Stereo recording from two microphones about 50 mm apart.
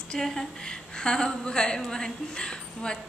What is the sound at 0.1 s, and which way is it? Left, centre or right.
A woman's voice, centre.